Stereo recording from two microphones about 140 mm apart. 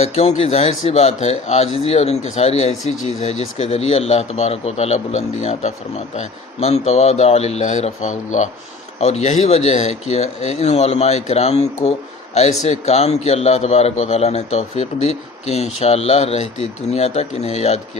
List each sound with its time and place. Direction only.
0.0 s speech: 50° left (ahead or behind)